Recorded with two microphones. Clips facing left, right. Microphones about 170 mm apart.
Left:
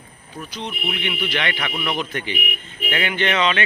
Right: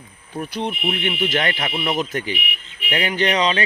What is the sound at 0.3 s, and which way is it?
Speech, 55° right (ahead or behind).